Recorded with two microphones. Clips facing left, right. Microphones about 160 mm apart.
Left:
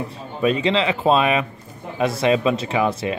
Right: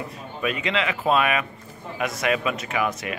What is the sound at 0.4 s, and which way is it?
Speech, 30° left (ahead or behind).